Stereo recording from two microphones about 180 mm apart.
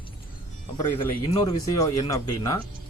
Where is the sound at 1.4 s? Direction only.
20° left (ahead or behind).